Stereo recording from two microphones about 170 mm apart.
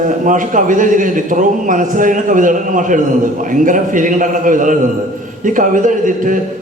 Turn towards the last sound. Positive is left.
turn(degrees=-50)  # may be behind; listen again after turning